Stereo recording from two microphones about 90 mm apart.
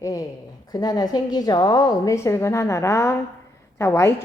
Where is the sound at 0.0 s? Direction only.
40° left (ahead or behind).